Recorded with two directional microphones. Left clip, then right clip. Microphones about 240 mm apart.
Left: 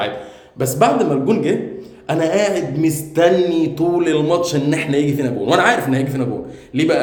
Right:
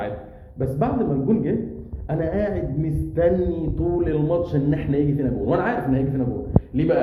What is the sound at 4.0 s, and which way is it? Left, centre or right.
A man's voice, centre.